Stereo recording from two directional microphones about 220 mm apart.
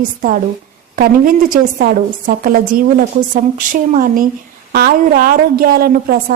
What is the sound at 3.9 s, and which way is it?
A woman's voice, 40° right (ahead or behind).